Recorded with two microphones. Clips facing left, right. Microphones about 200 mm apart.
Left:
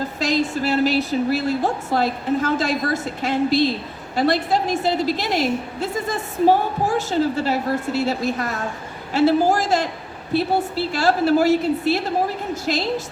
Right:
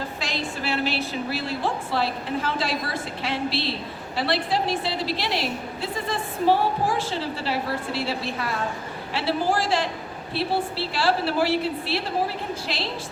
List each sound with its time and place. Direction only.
0.2 s a woman's voice: 40° left (ahead or behind)